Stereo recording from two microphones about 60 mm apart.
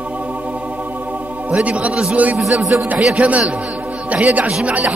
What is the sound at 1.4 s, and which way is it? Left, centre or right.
Speech, right.